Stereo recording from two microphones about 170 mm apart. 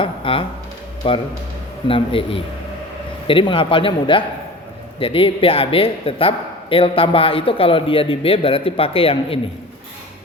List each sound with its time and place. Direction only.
0.0 s a man's voice: 30° left (ahead or behind)